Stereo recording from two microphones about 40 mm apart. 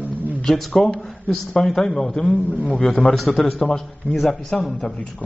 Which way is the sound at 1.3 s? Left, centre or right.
Centre.